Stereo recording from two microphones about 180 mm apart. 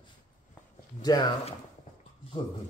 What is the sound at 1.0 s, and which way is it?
Speech, 20° left (ahead or behind).